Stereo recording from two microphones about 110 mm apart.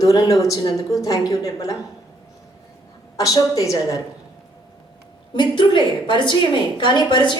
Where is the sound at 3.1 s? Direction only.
30° left (ahead or behind).